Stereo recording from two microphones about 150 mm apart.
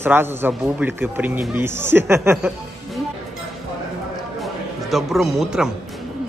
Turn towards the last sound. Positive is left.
turn(degrees=-5)  # may be behind; listen again after turning